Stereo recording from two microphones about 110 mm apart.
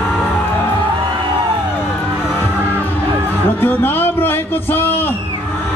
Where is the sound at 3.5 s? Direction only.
20° left (ahead or behind).